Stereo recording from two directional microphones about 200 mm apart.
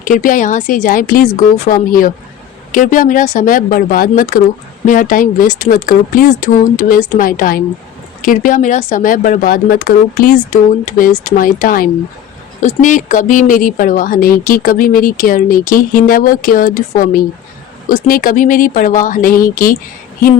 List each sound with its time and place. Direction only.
0.0 s speech: 40° left (ahead or behind)